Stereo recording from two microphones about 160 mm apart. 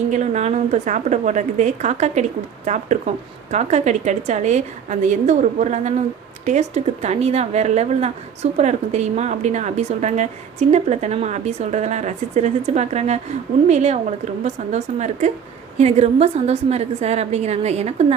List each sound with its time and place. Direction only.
0.1 s a woman's voice: 45° right (ahead or behind)